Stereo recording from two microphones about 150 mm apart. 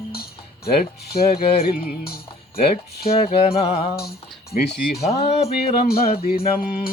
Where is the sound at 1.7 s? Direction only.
90° left.